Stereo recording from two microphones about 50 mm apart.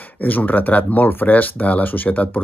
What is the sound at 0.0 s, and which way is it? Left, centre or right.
Speech, left.